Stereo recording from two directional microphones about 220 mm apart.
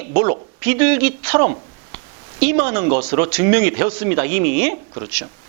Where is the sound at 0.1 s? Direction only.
25° right (ahead or behind).